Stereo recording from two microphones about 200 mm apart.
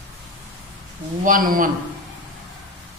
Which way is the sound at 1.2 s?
45° right (ahead or behind).